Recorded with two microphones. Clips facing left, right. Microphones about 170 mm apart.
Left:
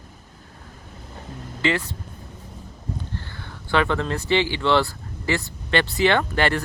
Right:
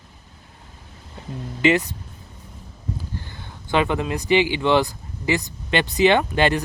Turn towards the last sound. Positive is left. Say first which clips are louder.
# right 3 dB
turn(degrees=-15)  # may be behind; listen again after turning